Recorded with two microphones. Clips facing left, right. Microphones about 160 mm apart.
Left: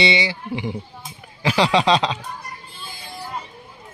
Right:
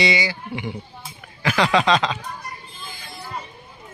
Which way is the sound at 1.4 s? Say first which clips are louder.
Left 1 dB; 30° left (ahead or behind).